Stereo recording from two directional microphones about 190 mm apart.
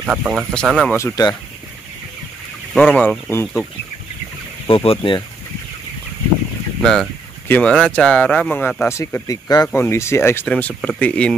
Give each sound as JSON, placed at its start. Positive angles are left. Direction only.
{"t": 0.0, "sound": "speech", "side_deg": -5}
{"t": 0.9, "sound": "speech", "side_deg": 15}
{"t": 2.7, "sound": "speech", "side_deg": 5}
{"t": 4.6, "sound": "speech", "side_deg": 30}
{"t": 6.8, "sound": "speech", "side_deg": 5}